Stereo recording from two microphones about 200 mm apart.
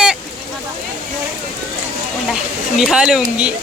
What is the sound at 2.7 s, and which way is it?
Speech, centre (ahead or behind).